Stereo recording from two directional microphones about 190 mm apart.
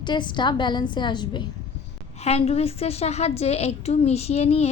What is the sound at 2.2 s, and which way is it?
A woman's voice, 35° left (ahead or behind).